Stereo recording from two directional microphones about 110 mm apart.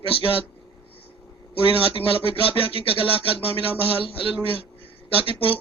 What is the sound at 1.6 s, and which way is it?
A man's voice, 55° left (ahead or behind).